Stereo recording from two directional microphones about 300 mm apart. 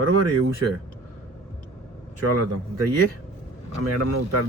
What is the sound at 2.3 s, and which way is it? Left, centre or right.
Speech, right.